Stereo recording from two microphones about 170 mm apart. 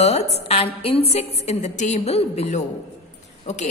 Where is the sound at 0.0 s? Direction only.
40° left (ahead or behind).